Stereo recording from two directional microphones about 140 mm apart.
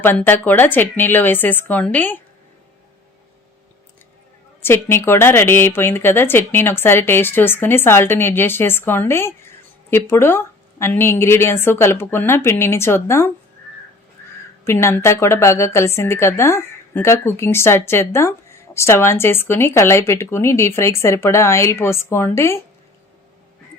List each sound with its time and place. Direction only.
0.0 s speech: 15° left (ahead or behind)
4.6 s speech: 15° left (ahead or behind)
14.6 s a woman's voice: 20° left (ahead or behind)